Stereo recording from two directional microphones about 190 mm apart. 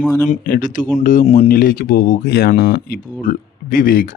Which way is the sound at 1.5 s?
50° left (ahead or behind).